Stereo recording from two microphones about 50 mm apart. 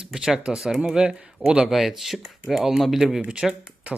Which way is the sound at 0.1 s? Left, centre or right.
Centre.